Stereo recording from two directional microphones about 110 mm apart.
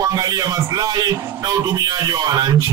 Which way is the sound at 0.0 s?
35° right (ahead or behind).